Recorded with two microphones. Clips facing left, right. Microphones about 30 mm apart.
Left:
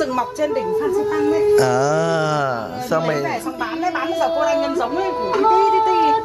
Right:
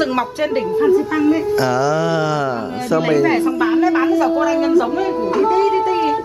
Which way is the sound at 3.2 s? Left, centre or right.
Right.